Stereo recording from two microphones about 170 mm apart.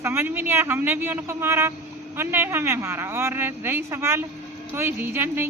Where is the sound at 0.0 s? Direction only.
15° right (ahead or behind).